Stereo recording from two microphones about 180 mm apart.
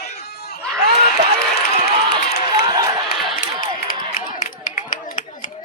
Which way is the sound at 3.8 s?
50° left (ahead or behind).